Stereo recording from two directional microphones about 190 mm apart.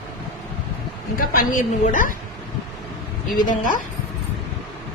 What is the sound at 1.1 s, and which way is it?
Speech, 50° left (ahead or behind).